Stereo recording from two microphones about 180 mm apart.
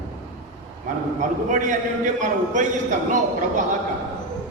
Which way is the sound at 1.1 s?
45° right (ahead or behind).